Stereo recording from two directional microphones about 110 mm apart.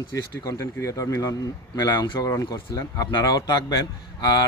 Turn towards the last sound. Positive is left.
turn(degrees=40)  # may be behind; listen again after turning